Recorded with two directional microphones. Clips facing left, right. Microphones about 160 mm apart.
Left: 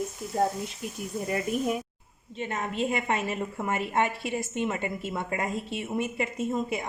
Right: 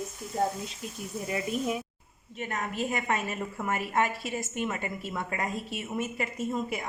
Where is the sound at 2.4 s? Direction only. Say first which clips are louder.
Left 3 dB; 25° left (ahead or behind).